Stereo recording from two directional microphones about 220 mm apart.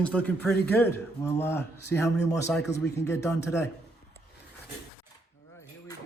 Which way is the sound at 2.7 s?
50° left (ahead or behind).